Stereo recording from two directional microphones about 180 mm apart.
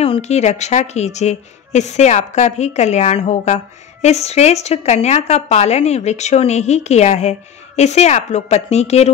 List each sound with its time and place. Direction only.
0.0 s a woman's voice: 35° left (ahead or behind)